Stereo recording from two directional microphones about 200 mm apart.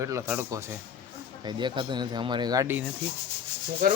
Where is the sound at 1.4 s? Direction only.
25° right (ahead or behind).